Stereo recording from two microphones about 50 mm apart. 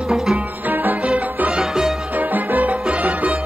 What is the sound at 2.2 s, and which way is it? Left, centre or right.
Music, right.